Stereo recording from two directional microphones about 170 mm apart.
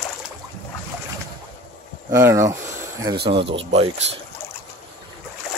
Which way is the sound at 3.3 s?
30° right (ahead or behind).